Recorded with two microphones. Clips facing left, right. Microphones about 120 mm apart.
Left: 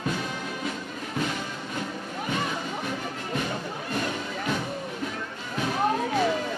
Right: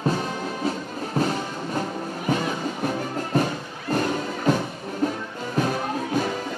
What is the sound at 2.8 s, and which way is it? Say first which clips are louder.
Music: right 6 dB; 40° right (ahead or behind).